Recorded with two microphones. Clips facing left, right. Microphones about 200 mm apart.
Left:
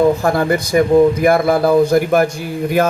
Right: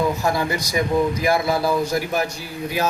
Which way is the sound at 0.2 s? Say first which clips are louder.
Left 7 dB; 55° left (ahead or behind).